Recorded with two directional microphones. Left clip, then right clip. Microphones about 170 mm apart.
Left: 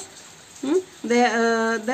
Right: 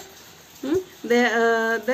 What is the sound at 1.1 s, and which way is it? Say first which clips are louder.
Speech: right 1 dB; 60° left (ahead or behind).